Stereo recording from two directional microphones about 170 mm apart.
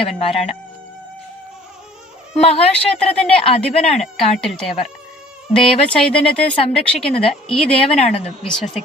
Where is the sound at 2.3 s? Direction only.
35° left (ahead or behind).